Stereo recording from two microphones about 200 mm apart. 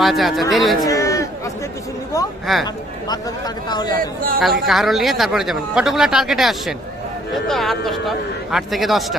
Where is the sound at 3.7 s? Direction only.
20° left (ahead or behind).